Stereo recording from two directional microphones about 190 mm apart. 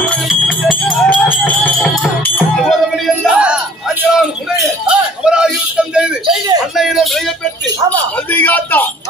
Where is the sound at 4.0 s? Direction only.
5° right (ahead or behind).